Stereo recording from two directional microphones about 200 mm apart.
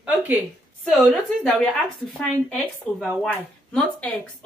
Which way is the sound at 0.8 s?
Centre (ahead or behind).